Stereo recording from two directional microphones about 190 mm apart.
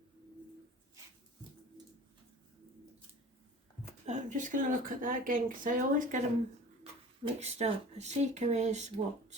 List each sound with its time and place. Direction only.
4.0 s speech: 40° right (ahead or behind)
7.3 s speech: 35° right (ahead or behind)